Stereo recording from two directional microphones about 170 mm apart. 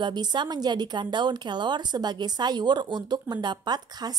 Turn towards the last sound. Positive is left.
turn(degrees=-25)  # may be behind; listen again after turning